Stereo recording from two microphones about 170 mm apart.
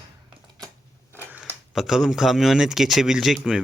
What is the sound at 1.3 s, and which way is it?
Speech, 5° right (ahead or behind).